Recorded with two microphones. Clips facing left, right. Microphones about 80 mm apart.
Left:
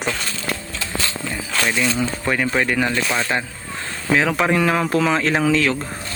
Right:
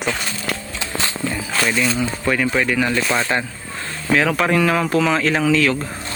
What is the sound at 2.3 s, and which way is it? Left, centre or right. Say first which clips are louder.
Speech: right 1 dB; left.